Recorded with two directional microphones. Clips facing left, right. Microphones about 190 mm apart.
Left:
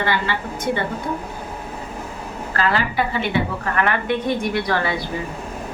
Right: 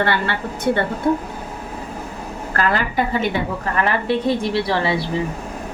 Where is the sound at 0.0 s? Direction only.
60° right (ahead or behind).